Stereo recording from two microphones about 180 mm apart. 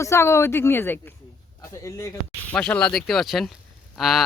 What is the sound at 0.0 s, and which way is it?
Speech, 15° left (ahead or behind).